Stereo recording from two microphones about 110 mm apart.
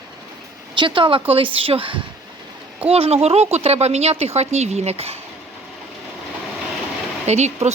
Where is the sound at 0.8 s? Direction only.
50° right (ahead or behind).